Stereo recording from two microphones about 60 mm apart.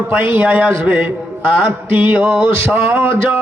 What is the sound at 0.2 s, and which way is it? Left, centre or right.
Speech, right.